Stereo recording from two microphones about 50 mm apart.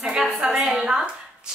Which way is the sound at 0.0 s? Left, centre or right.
Centre.